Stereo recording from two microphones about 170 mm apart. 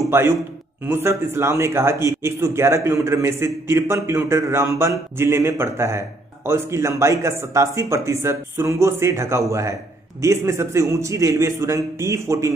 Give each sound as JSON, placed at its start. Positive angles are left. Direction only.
{"t": 0.1, "sound": "a man's voice", "side_deg": -15}